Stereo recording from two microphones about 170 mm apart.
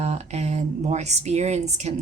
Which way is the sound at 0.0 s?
40° right (ahead or behind).